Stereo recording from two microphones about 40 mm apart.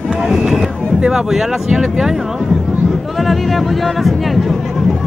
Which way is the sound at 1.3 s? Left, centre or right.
Centre.